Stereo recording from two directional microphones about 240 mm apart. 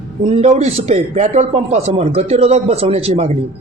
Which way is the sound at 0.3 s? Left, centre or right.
Right.